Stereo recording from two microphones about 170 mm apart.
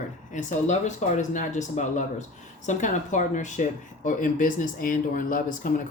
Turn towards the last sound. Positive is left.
turn(degrees=50)  # may be behind; listen again after turning